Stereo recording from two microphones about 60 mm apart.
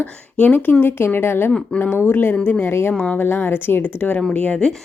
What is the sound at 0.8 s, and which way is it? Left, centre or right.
Speech, left.